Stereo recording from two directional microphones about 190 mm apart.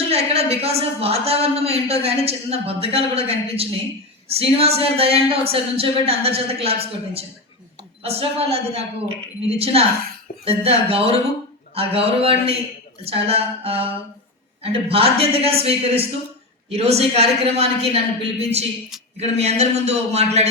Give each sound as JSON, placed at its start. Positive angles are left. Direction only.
{"t": 0.1, "sound": "a woman's voice", "side_deg": -30}
{"t": 8.0, "sound": "a woman's voice", "side_deg": -30}